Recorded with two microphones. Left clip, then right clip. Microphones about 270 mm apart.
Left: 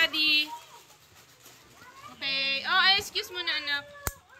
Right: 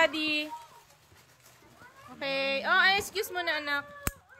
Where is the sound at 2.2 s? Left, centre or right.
Centre.